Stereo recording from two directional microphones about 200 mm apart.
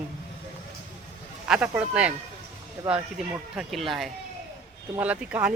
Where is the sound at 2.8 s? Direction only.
15° right (ahead or behind).